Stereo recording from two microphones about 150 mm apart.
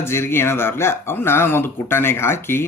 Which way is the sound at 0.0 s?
15° left (ahead or behind).